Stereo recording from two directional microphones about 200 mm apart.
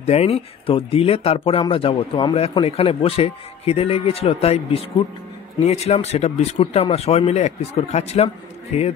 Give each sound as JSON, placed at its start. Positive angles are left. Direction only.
{"t": 0.0, "sound": "speech", "side_deg": 30}